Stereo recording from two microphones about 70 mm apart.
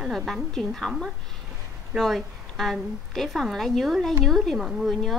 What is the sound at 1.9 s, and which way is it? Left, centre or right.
A woman's voice, centre.